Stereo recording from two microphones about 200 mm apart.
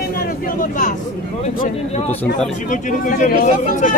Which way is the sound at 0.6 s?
40° left (ahead or behind).